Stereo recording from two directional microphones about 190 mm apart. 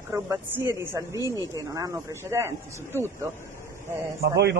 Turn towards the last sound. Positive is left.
turn(degrees=-60)  # may be behind; listen again after turning